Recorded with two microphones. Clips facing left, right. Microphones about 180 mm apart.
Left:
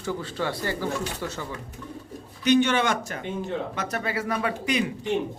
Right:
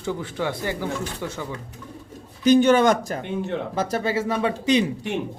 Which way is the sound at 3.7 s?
30° right (ahead or behind).